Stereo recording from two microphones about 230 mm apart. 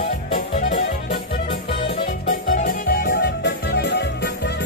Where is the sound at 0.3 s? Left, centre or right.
Left.